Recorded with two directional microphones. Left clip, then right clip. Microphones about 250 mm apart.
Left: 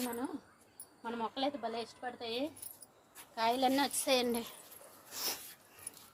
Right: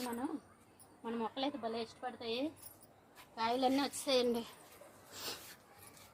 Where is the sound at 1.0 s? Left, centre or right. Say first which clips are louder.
Left 2 dB; left.